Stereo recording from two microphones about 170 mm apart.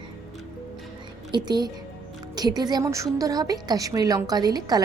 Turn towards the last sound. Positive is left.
turn(degrees=-25)  # may be behind; listen again after turning